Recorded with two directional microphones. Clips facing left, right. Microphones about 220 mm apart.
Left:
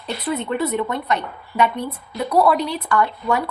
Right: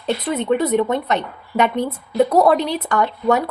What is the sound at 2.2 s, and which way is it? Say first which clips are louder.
Speech: even; 45° right (ahead or behind).